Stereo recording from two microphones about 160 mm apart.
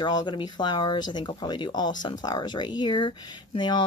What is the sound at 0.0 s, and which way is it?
Speech, 30° left (ahead or behind).